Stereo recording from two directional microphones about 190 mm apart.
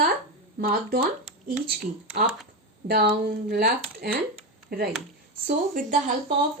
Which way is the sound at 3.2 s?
55° right (ahead or behind).